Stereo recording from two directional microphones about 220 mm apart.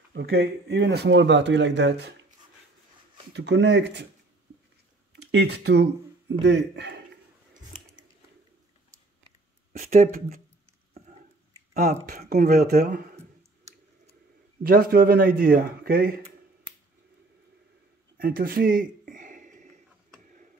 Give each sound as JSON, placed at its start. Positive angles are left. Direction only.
{"t": 0.1, "sound": "speech", "side_deg": -50}
{"t": 3.3, "sound": "speech", "side_deg": -50}
{"t": 5.1, "sound": "speech", "side_deg": -50}
{"t": 9.7, "sound": "a man's voice", "side_deg": -35}
{"t": 11.0, "sound": "a sound", "side_deg": -30}
{"t": 14.6, "sound": "a man's voice", "side_deg": -40}
{"t": 18.1, "sound": "a sound", "side_deg": -40}